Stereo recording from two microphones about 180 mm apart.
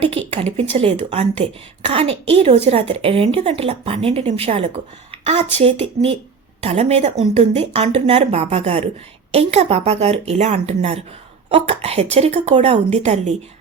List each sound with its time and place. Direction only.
0.0 s a woman's voice: 30° right (ahead or behind)